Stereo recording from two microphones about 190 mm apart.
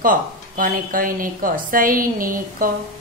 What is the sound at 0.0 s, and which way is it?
A woman's voice, 45° right (ahead or behind).